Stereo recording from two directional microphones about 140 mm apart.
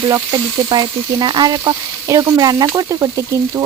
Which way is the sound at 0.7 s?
30° right (ahead or behind).